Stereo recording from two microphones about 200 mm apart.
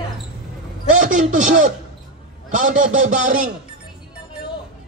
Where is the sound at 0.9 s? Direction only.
40° right (ahead or behind).